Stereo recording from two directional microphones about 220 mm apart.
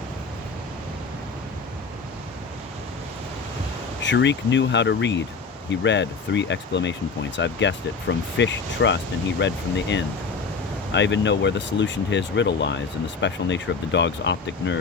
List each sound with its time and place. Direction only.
4.0 s speech: 55° left (ahead or behind)